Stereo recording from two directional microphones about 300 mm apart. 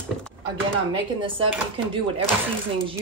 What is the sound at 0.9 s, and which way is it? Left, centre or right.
Speech, centre.